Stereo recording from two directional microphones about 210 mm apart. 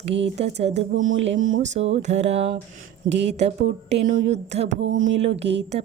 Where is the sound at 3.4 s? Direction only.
30° right (ahead or behind).